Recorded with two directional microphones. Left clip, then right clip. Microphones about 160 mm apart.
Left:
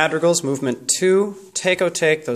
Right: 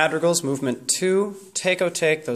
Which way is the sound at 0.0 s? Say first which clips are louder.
Left 3 dB; 15° left (ahead or behind).